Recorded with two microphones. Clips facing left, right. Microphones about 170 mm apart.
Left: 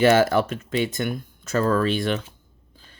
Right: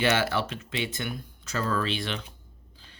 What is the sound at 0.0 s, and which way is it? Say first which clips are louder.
Speech: left 8 dB; 45° left (ahead or behind).